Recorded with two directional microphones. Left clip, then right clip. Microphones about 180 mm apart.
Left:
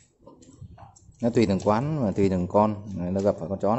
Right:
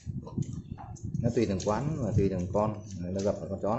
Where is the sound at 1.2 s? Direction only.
60° left (ahead or behind).